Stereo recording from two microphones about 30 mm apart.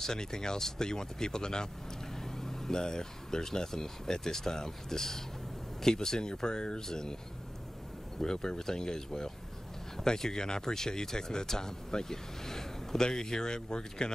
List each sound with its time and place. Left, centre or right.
0.0 s speech: left
8.2 s speech: left